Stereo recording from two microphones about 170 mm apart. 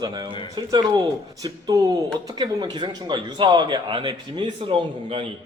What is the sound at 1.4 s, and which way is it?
Speech, 20° right (ahead or behind).